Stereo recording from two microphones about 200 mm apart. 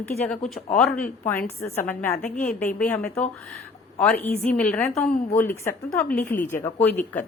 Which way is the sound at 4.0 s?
5° left (ahead or behind).